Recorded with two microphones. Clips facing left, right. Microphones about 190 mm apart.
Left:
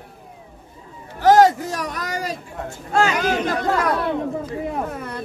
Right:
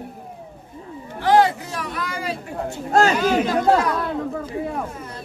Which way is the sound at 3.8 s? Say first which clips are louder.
Left 1 dB; 65° left (ahead or behind).